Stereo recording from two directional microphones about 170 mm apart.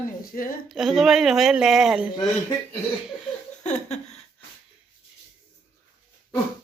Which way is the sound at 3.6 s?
40° left (ahead or behind).